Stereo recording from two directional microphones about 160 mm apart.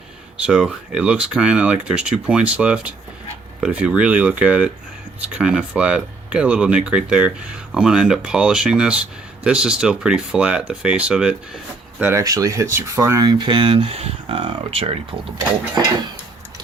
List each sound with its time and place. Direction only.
0.4 s speech: 5° right (ahead or behind)
12.2 s speech: 20° right (ahead or behind); by 15.3 s 35° right (ahead or behind)